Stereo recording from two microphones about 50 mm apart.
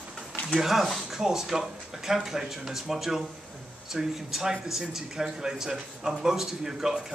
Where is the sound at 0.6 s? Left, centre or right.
Centre.